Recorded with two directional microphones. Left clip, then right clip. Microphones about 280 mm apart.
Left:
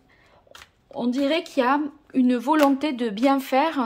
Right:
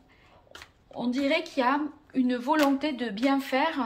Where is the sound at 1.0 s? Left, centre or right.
Left.